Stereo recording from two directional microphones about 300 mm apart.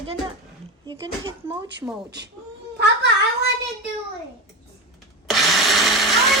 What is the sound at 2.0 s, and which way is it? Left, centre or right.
A child's voice, right.